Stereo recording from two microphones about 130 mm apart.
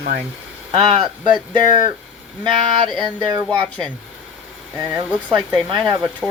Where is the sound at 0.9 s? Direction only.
35° right (ahead or behind).